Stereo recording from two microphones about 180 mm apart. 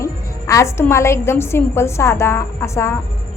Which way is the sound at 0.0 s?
15° left (ahead or behind).